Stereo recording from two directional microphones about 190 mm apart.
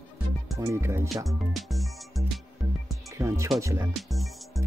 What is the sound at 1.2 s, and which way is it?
Music, centre (ahead or behind).